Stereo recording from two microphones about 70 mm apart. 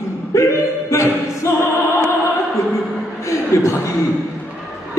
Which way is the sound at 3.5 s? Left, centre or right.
Left.